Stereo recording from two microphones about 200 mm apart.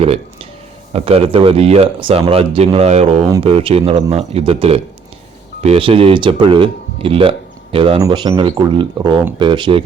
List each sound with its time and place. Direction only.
0.9 s speech: 30° right (ahead or behind)